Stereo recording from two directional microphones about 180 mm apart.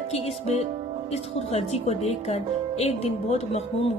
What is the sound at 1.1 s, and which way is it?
Speech, 35° left (ahead or behind).